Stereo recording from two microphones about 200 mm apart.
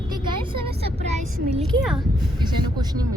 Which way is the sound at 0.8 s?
30° right (ahead or behind).